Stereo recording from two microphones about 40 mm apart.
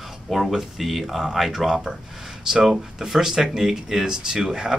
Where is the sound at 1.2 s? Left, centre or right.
Centre.